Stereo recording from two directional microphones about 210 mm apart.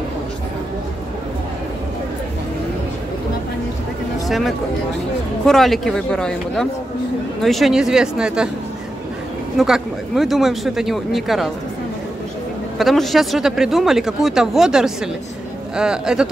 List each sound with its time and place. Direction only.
4.3 s speech: centre (ahead or behind)
9.6 s speech: centre (ahead or behind)
12.7 s speech: centre (ahead or behind)